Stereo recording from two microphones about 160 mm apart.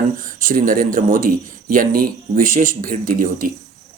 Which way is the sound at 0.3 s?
60° right (ahead or behind).